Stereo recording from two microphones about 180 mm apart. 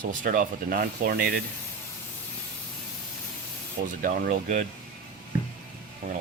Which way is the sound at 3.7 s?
50° right (ahead or behind).